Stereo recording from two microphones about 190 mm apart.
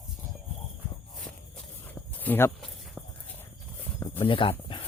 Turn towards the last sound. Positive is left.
turn(degrees=25)  # may be behind; listen again after turning